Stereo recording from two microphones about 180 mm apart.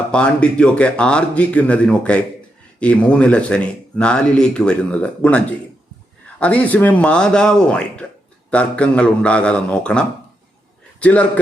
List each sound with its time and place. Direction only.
0.1 s a man's voice: 5° left (ahead or behind)
6.4 s a man's voice: 10° left (ahead or behind)